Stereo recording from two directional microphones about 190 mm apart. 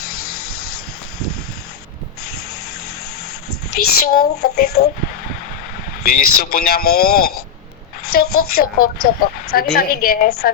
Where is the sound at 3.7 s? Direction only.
50° left (ahead or behind).